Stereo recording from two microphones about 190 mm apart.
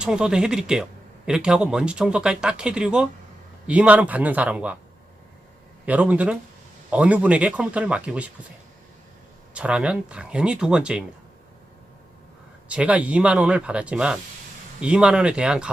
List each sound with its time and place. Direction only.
0.0 s speech: 5° right (ahead or behind)
5.8 s speech: 5° right (ahead or behind)
9.6 s speech: 5° right (ahead or behind)
12.6 s speech: 5° right (ahead or behind)